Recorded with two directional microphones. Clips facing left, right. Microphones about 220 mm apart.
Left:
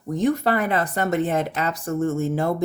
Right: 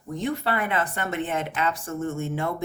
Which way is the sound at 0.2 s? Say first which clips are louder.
Left 6 dB; 45° left (ahead or behind).